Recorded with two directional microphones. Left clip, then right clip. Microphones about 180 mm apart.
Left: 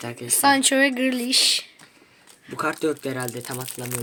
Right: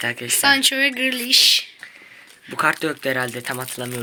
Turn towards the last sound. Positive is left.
turn(degrees=-5)  # may be behind; listen again after turning